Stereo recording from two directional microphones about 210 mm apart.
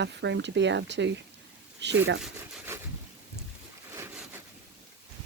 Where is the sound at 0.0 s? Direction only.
55° right (ahead or behind).